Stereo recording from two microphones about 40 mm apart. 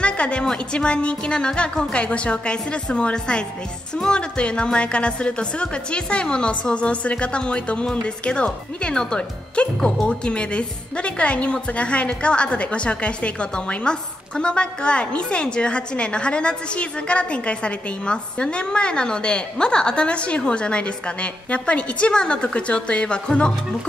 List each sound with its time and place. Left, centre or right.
0.0 s a woman's voice: left